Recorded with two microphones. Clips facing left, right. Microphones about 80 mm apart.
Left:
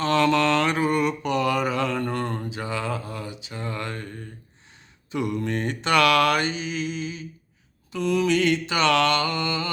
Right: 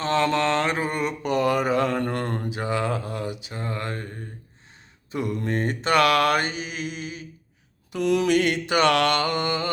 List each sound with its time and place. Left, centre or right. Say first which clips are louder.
0.0 s mantra: left 2 dB; right
3.5 s a sound: right 1 dB; right
5.1 s mantra: even; right
7.9 s mantra: right 1 dB; right